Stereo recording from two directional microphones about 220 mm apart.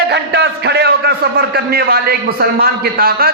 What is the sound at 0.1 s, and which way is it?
A man's voice, 50° right (ahead or behind).